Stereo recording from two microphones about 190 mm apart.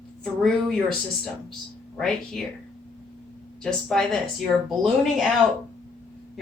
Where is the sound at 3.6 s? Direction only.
5° left (ahead or behind).